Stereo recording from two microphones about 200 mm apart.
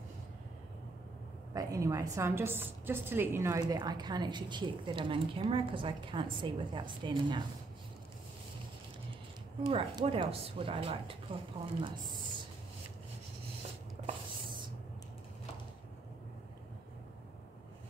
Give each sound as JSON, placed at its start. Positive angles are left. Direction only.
{"t": 1.5, "sound": "a woman's voice", "side_deg": -15}
{"t": 9.6, "sound": "a woman's voice", "side_deg": -25}
{"t": 14.0, "sound": "a sound", "side_deg": -25}